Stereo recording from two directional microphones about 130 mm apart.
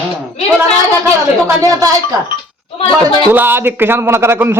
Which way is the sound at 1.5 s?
25° right (ahead or behind).